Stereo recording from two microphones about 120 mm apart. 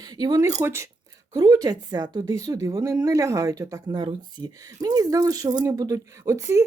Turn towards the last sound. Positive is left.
turn(degrees=-25)  # may be behind; listen again after turning